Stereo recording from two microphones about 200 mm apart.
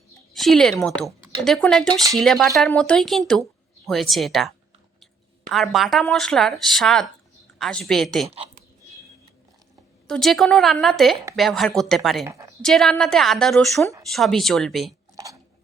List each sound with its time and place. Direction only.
0.3 s speech: centre (ahead or behind)
10.1 s speech: centre (ahead or behind)
12.2 s a woman's voice: 15° right (ahead or behind)
12.6 s speech: centre (ahead or behind)
15.1 s a sound: 15° right (ahead or behind)